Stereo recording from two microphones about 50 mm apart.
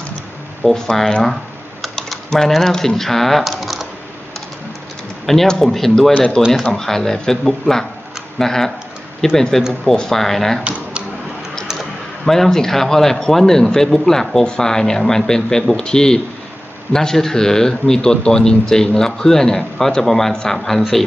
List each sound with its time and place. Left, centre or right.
0.6 s speech: centre
5.2 s speech: centre
6.1 s speech: centre
10.6 s speech: right
12.2 s speech: centre